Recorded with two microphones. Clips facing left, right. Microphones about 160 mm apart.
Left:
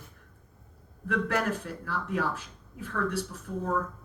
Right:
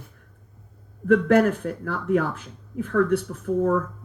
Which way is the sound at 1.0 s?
55° right (ahead or behind).